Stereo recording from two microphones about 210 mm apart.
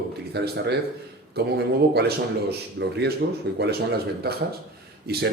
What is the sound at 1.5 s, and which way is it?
A man's voice, 50° right (ahead or behind).